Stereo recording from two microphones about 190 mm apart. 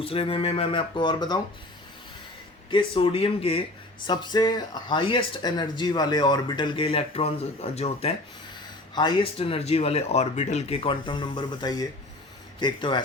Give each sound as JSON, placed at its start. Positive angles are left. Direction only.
{"t": 0.0, "sound": "speech", "side_deg": 30}
{"t": 2.6, "sound": "speech", "side_deg": 25}